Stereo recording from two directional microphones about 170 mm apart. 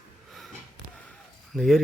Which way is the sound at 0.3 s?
Centre (ahead or behind).